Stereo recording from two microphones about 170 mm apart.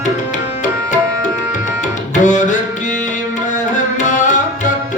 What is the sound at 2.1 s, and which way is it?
Music, 45° left (ahead or behind).